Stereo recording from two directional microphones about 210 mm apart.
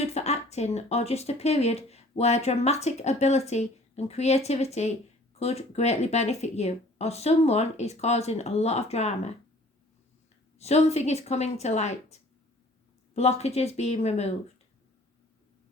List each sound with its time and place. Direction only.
0.0 s speech: 30° left (ahead or behind)
10.6 s speech: 30° left (ahead or behind)